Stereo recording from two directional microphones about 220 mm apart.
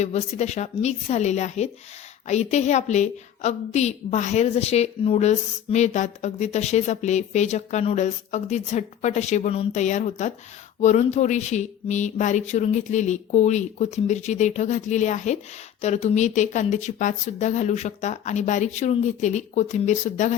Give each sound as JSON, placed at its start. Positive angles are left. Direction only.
{"t": 0.0, "sound": "a woman's voice", "side_deg": 30}